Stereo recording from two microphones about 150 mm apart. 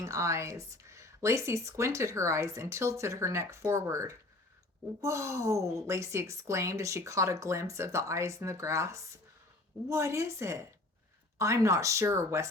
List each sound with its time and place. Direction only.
0.0 s speech: 20° right (ahead or behind)